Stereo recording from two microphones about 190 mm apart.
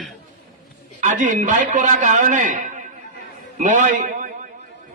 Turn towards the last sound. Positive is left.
turn(degrees=-45)  # may be behind; listen again after turning